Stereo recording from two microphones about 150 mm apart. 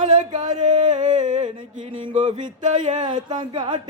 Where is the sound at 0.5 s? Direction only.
55° right (ahead or behind).